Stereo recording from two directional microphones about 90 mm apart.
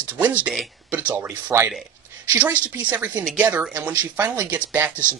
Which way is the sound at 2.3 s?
15° right (ahead or behind).